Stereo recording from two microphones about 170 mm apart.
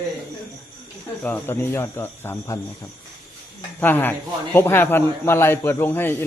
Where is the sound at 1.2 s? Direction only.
10° left (ahead or behind).